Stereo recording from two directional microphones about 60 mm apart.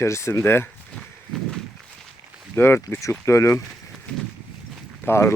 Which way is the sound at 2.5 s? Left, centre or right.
Left.